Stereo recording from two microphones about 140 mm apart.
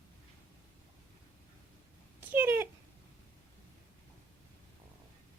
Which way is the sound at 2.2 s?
15° right (ahead or behind).